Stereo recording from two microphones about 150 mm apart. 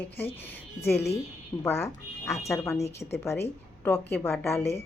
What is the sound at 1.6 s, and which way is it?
A woman's voice, 20° left (ahead or behind).